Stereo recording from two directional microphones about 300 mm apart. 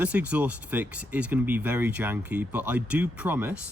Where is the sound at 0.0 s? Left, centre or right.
Centre.